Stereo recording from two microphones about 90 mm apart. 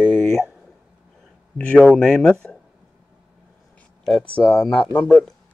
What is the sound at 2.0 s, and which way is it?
Speech, 5° left (ahead or behind).